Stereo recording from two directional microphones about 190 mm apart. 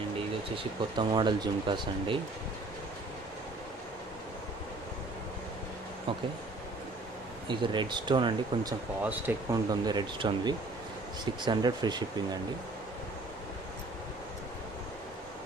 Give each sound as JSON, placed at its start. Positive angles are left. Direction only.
{"t": 0.5, "sound": "speech", "side_deg": -25}
{"t": 7.4, "sound": "speech", "side_deg": -25}
{"t": 9.0, "sound": "speech", "side_deg": -15}